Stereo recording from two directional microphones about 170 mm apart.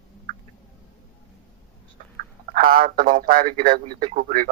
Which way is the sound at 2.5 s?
55° right (ahead or behind).